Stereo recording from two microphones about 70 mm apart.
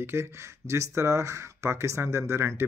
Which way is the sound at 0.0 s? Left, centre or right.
Right.